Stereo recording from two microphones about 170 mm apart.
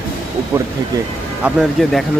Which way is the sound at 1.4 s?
5° right (ahead or behind).